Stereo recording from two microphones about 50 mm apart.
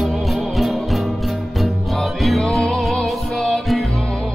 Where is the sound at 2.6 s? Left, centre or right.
Centre.